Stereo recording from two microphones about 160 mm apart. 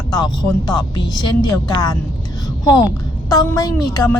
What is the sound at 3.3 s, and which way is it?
Speech, 25° left (ahead or behind).